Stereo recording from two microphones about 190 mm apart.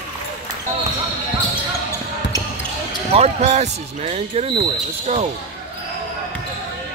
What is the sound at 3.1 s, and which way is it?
Speech, 35° right (ahead or behind).